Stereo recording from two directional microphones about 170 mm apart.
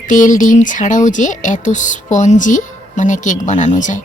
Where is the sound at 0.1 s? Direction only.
50° left (ahead or behind).